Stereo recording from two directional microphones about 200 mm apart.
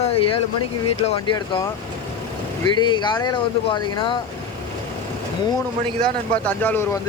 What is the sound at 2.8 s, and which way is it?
Speech, 25° left (ahead or behind).